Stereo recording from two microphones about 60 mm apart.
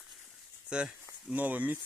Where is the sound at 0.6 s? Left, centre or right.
Centre.